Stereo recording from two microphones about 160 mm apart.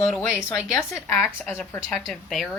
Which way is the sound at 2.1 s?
Centre (ahead or behind).